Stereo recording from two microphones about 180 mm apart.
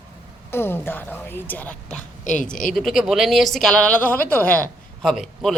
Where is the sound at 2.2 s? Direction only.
45° left (ahead or behind).